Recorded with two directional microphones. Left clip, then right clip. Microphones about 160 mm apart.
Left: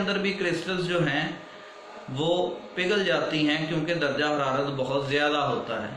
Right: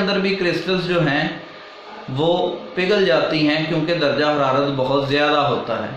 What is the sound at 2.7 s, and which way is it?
A man's voice, 25° right (ahead or behind).